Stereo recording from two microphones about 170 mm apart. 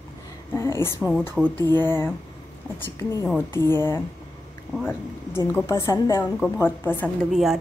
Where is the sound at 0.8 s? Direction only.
10° right (ahead or behind).